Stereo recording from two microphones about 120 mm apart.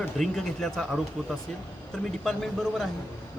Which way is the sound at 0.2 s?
Centre (ahead or behind).